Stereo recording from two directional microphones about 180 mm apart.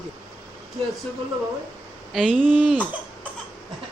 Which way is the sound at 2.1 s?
5° right (ahead or behind).